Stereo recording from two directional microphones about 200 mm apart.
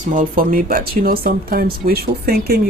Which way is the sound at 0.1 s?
45° right (ahead or behind).